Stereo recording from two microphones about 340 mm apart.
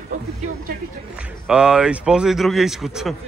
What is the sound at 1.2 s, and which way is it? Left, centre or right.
Speech, centre.